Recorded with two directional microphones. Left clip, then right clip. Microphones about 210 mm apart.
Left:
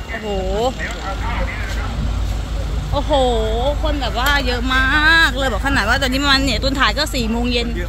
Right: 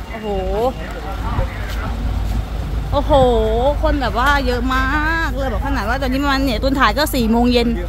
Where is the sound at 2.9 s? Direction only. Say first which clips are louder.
Right 3 dB; 30° right (ahead or behind).